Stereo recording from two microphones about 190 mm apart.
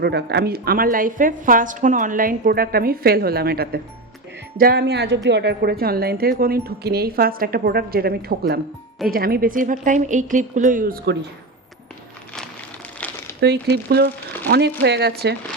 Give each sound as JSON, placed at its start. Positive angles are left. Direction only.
{"t": 0.0, "sound": "a woman's voice", "side_deg": -60}
{"t": 4.8, "sound": "a woman's voice", "side_deg": -65}
{"t": 13.4, "sound": "speech", "side_deg": -60}